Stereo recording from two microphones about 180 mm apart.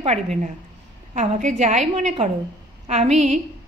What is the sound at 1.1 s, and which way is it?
Speech, 40° right (ahead or behind).